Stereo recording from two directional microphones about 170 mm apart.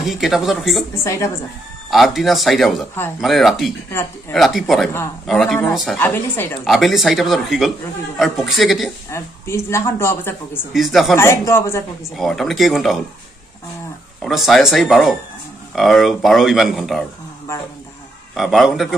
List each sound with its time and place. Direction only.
0.0 s speech: centre (ahead or behind)
1.0 s speech: 20° left (ahead or behind)
1.9 s speech: centre (ahead or behind)
5.9 s speech: 15° left (ahead or behind)
6.6 s speech: centre (ahead or behind)
9.1 s speech: 15° left (ahead or behind)
10.7 s speech: centre (ahead or behind)
11.1 s speech: 15° left (ahead or behind)
12.2 s speech: centre (ahead or behind)
14.2 s speech: centre (ahead or behind)
18.3 s speech: centre (ahead or behind)